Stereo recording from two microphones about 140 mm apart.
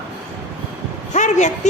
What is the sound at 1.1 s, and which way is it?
Speech, 60° left (ahead or behind).